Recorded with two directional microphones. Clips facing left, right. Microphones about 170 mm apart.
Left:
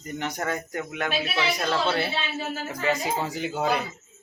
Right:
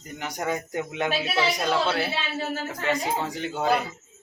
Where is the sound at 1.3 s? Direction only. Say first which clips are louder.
Right 2 dB; 10° right (ahead or behind).